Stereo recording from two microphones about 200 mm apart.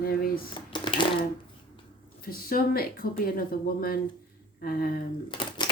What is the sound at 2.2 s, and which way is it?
Speech, 45° left (ahead or behind).